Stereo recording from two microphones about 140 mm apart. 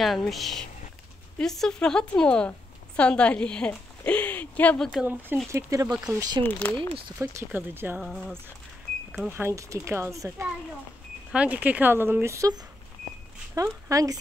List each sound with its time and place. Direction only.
0.0 s speech: centre (ahead or behind)
5.0 s speech: 15° right (ahead or behind)
6.4 s speech: 15° left (ahead or behind)
7.2 s speech: 15° right (ahead or behind)
8.0 s speech: centre (ahead or behind)
9.3 s speech: 20° right (ahead or behind)
13.6 s speech: 25° right (ahead or behind)